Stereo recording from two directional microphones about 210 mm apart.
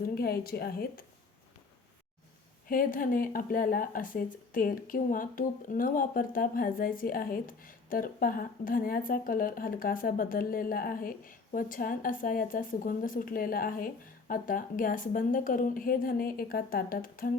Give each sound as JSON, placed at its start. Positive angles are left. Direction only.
{"t": 0.0, "sound": "speech", "side_deg": 45}
{"t": 2.6, "sound": "speech", "side_deg": 40}